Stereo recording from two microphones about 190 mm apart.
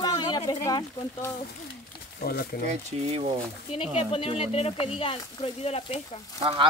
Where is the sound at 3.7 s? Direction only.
30° left (ahead or behind).